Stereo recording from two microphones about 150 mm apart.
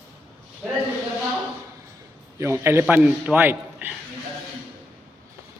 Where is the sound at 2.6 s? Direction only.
15° right (ahead or behind).